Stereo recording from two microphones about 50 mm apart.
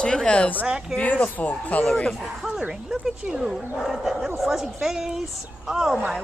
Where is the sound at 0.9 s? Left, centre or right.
Left.